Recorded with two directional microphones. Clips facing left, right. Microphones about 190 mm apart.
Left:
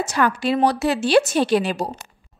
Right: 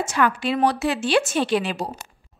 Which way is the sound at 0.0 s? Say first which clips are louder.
Left 1 dB; 40° left (ahead or behind).